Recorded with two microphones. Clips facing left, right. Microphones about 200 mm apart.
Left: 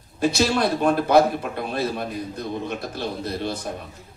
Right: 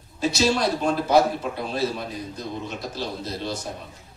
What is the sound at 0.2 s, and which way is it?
A man's voice, 55° left (ahead or behind).